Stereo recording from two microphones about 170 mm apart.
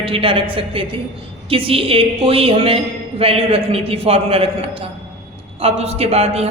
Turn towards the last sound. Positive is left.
turn(degrees=-35)  # may be behind; listen again after turning